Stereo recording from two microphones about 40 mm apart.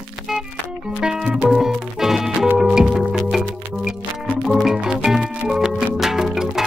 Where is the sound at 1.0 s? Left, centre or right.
Centre.